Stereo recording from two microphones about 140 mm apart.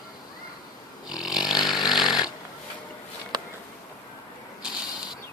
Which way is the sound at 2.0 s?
30° left (ahead or behind).